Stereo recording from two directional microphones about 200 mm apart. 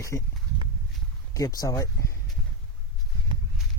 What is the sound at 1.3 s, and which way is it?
Speech, 15° left (ahead or behind).